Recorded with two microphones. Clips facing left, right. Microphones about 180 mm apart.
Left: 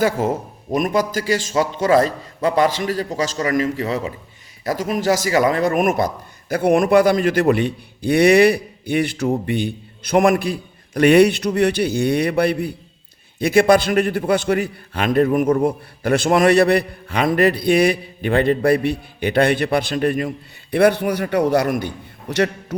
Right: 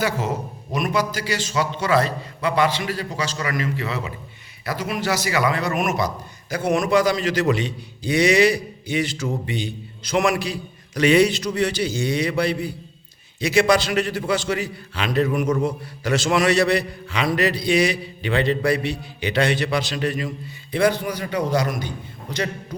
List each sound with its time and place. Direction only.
0.0 s a man's voice: 50° left (ahead or behind)